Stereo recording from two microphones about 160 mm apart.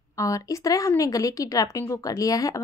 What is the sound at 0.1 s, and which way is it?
A woman's voice, 20° left (ahead or behind).